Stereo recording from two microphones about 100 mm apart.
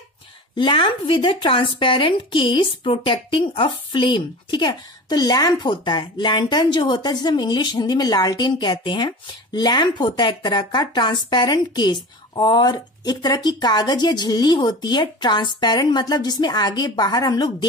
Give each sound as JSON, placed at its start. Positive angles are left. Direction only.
{"t": 0.6, "sound": "speech", "side_deg": 55}